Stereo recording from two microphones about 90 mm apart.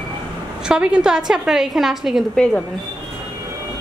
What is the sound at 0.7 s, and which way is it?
A woman's voice, 10° right (ahead or behind).